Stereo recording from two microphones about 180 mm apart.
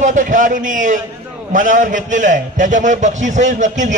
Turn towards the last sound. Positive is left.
turn(degrees=-45)  # may be behind; listen again after turning